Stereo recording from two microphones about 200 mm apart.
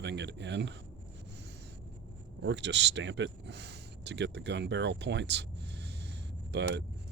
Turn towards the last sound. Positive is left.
turn(degrees=-55)  # may be behind; listen again after turning